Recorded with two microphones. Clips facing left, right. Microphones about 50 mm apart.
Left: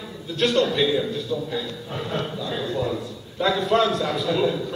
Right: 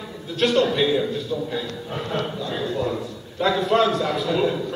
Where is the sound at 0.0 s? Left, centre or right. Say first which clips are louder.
Right 1 dB; centre.